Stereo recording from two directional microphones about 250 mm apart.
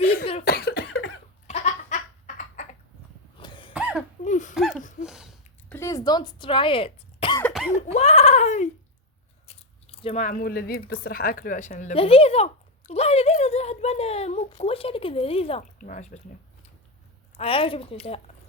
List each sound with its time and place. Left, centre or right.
0.0 s cough: left
1.5 s laughter: left
3.3 s a sound: centre
3.7 s cough: centre
4.2 s a sound: left
5.0 s a sound: centre
5.7 s throat clearing: centre
7.4 s cough: centre
7.9 s speech: left
17.3 s speech: left